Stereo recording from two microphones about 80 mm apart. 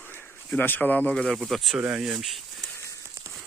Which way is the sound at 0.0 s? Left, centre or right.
Left.